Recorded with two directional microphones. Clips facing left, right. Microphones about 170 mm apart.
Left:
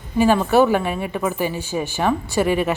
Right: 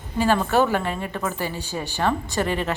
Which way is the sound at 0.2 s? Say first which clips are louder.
Left 4 dB; 15° left (ahead or behind).